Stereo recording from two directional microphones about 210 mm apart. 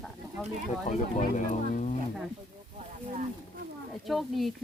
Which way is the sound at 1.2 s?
35° left (ahead or behind).